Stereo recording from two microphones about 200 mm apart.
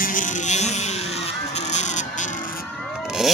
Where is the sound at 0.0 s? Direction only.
40° left (ahead or behind).